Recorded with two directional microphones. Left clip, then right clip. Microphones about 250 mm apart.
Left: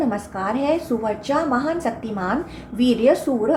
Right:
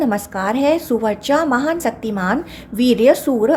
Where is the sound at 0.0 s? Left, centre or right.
Right.